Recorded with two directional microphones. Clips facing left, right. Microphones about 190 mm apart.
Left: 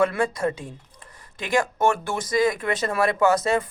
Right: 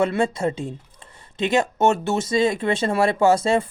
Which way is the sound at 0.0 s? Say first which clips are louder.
Right 1 dB; 25° right (ahead or behind).